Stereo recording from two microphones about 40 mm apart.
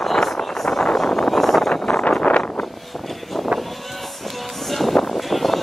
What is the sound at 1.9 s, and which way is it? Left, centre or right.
Vehicle, centre.